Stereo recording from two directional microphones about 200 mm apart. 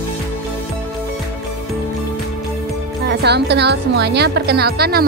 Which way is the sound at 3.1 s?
55° right (ahead or behind).